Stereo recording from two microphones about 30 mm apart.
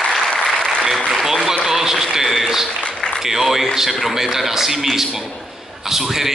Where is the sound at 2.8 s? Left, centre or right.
Left.